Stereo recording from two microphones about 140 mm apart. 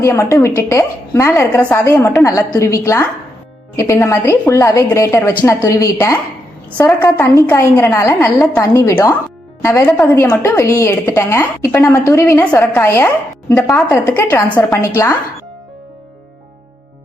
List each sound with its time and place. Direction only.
0.0 s a woman's voice: 20° left (ahead or behind)